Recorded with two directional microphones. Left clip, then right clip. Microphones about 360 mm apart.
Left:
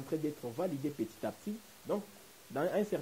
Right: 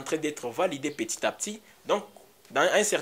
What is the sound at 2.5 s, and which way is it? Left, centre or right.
Speech, centre.